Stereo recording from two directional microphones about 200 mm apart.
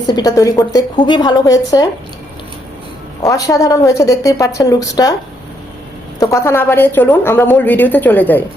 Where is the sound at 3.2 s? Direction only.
15° left (ahead or behind).